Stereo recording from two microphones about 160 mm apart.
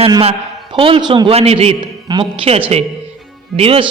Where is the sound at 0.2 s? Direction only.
35° right (ahead or behind).